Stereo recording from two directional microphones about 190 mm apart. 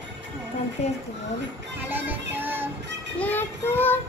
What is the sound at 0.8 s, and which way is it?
Speech, 35° left (ahead or behind).